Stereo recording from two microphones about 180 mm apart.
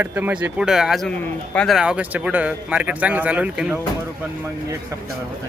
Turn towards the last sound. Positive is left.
turn(degrees=-5)  # may be behind; listen again after turning